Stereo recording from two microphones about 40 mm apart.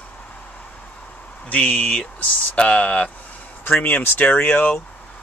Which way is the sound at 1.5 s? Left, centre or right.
Left.